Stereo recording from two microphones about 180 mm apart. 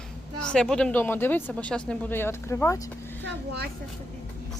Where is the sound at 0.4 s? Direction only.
5° left (ahead or behind).